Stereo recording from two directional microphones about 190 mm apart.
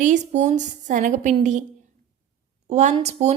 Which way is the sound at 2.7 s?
35° right (ahead or behind).